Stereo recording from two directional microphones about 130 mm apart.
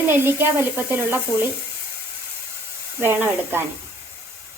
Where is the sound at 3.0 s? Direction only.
15° right (ahead or behind).